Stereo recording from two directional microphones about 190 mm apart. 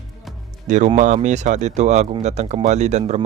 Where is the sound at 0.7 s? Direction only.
40° right (ahead or behind).